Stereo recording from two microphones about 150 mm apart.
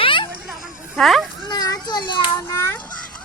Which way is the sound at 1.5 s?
25° left (ahead or behind).